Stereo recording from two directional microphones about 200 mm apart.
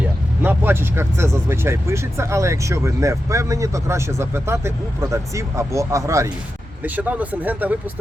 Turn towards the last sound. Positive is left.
turn(degrees=-10)  # may be behind; listen again after turning